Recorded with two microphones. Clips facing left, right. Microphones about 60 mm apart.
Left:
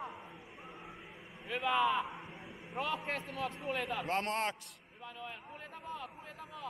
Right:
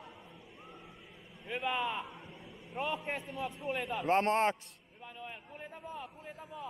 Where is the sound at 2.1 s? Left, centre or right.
Left.